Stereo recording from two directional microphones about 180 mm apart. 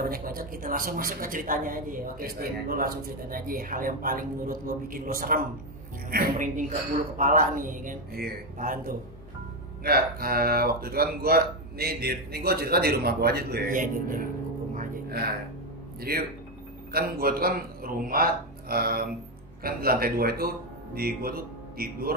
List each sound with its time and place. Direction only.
0.0 s speech: 55° right (ahead or behind)
14.7 s music: 55° right (ahead or behind)
16.0 s a man's voice: 55° right (ahead or behind)